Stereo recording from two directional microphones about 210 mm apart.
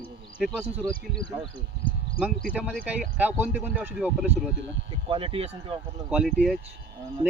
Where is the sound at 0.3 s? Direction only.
5° left (ahead or behind).